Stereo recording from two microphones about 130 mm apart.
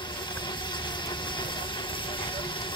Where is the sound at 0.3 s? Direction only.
35° left (ahead or behind).